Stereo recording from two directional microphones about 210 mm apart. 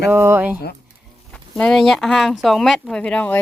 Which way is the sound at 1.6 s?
Centre (ahead or behind).